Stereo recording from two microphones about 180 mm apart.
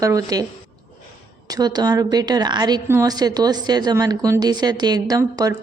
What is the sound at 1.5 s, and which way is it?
Speech, 20° right (ahead or behind).